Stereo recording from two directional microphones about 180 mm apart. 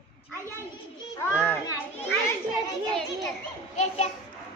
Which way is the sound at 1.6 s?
20° left (ahead or behind).